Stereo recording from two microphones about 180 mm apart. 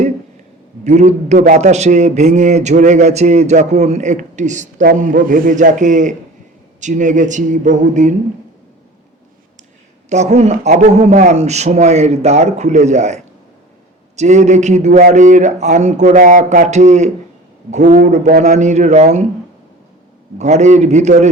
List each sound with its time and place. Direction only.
0.9 s a man's voice: 40° right (ahead or behind)
10.1 s a man's voice: 40° right (ahead or behind)
20.4 s a man's voice: 40° right (ahead or behind)